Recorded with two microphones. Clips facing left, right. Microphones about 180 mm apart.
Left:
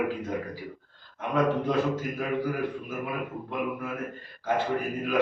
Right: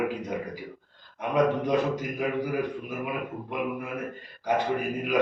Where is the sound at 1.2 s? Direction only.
15° right (ahead or behind).